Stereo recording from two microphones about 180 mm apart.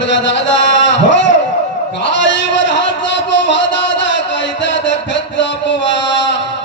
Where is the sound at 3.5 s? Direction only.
90° left.